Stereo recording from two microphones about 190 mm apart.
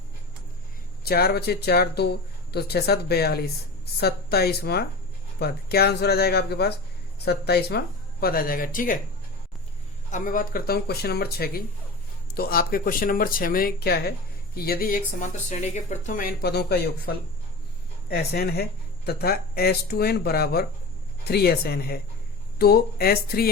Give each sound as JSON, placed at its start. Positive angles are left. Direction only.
{"t": 1.0, "sound": "speech", "side_deg": 55}
{"t": 10.1, "sound": "speech", "side_deg": 45}